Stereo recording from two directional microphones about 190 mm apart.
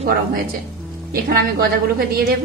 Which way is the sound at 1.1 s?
50° right (ahead or behind).